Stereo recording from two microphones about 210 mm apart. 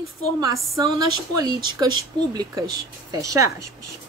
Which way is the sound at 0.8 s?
20° right (ahead or behind).